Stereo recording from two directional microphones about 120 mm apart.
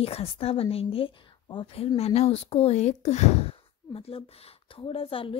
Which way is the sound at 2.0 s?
60° left (ahead or behind).